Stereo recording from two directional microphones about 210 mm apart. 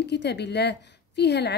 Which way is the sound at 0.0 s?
55° left (ahead or behind).